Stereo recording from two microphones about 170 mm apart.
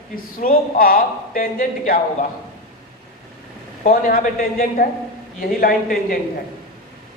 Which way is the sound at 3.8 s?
55° left (ahead or behind).